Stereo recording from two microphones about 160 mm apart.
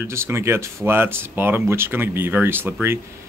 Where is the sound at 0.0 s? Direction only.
15° right (ahead or behind).